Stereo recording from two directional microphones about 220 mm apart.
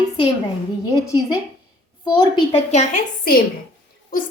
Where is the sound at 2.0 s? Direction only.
20° left (ahead or behind); by 3.4 s 40° left (ahead or behind).